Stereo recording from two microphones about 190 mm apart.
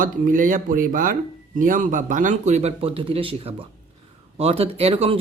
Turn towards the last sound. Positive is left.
turn(degrees=-30)  # may be behind; listen again after turning